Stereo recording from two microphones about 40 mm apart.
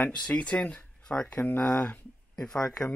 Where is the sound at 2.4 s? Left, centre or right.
Centre.